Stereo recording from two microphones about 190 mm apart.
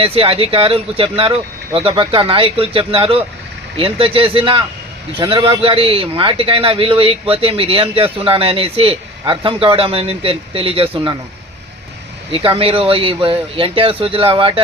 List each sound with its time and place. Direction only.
0.0 s a man's voice: 30° right (ahead or behind)
12.3 s a man's voice: 30° right (ahead or behind)